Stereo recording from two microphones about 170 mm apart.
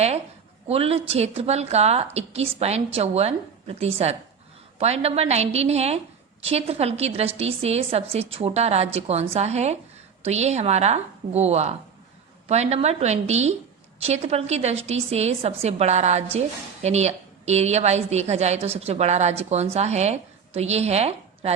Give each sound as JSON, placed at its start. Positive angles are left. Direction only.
{"t": 0.7, "sound": "a woman's voice", "side_deg": -35}